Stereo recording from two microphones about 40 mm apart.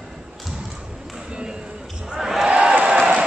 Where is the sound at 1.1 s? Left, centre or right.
Centre.